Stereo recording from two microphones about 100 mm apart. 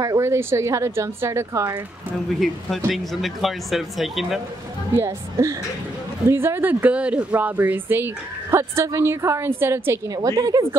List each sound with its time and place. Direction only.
0.0 s a woman's voice: 30° right (ahead or behind)
2.9 s speech: centre (ahead or behind)
4.9 s speech: 30° right (ahead or behind)
10.0 s a woman's voice: 40° right (ahead or behind)